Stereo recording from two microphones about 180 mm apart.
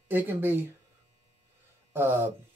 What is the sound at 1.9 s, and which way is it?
Speech, 10° right (ahead or behind).